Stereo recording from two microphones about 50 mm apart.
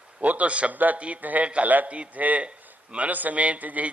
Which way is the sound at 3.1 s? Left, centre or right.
Right.